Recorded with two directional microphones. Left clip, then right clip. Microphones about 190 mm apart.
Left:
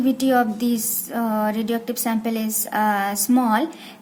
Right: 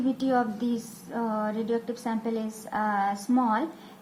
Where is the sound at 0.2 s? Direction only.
35° left (ahead or behind).